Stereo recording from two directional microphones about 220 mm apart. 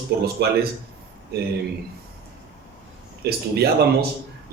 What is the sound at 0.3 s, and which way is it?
Speech, 45° right (ahead or behind).